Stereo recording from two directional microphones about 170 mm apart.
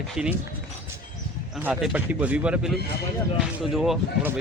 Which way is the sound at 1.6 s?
5° right (ahead or behind).